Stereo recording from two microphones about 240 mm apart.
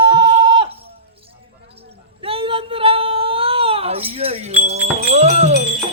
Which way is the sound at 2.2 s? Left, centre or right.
Right.